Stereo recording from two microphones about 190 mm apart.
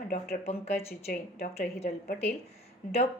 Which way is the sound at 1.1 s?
45° left (ahead or behind).